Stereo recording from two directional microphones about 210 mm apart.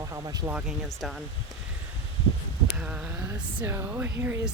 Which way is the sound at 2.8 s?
5° right (ahead or behind).